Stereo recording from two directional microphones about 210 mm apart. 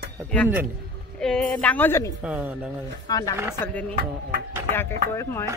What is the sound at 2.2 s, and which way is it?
Speech, 5° right (ahead or behind).